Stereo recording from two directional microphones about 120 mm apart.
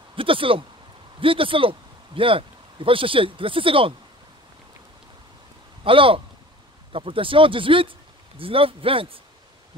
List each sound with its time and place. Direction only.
0.1 s speech: 45° right (ahead or behind)
5.9 s speech: 45° right (ahead or behind)